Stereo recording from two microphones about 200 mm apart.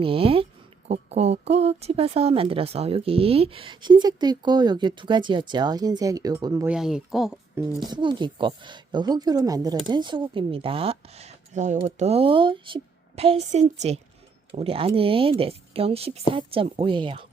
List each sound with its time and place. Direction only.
0.0 s speech: 25° right (ahead or behind)
6.7 s speech: centre (ahead or behind)
7.8 s a woman's voice: 25° right (ahead or behind)